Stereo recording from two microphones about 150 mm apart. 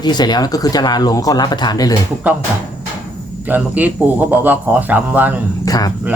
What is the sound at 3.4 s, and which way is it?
Speech, 10° right (ahead or behind).